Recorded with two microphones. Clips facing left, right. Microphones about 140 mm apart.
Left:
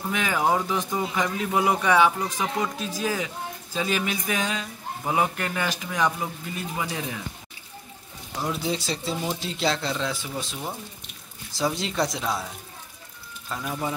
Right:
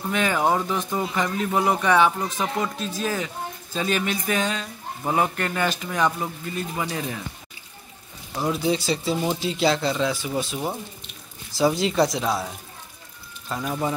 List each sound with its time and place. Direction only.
0.1 s speech: 10° left (ahead or behind)
8.5 s speech: centre (ahead or behind)
10.3 s speech: 20° right (ahead or behind)
11.5 s speech: 5° right (ahead or behind)
13.5 s speech: 10° right (ahead or behind)